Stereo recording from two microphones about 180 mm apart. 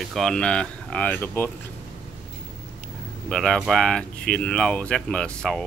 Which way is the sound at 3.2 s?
5° left (ahead or behind).